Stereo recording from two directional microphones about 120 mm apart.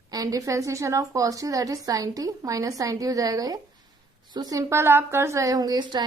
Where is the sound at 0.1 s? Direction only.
30° right (ahead or behind).